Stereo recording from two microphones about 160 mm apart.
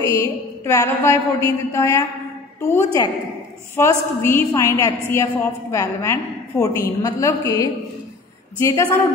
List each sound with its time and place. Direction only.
0.0 s a woman's voice: 20° left (ahead or behind)